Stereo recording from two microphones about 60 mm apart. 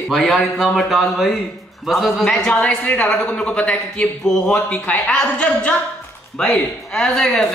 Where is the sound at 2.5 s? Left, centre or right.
Left.